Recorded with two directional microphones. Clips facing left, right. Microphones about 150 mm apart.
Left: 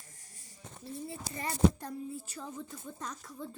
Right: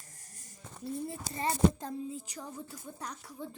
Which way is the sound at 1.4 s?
25° right (ahead or behind).